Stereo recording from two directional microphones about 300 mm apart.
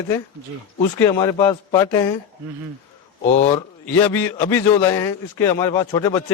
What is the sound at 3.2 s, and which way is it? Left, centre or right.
Speech, left.